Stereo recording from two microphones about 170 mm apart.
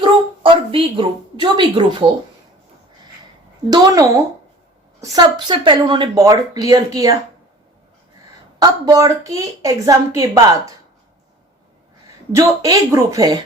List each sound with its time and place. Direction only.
0.0 s a woman's voice: 30° right (ahead or behind)
3.7 s speech: 20° right (ahead or behind)
8.5 s speech: 25° right (ahead or behind)
12.3 s speech: 20° right (ahead or behind)